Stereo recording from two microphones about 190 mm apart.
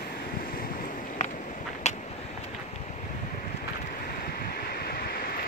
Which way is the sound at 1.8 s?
35° left (ahead or behind).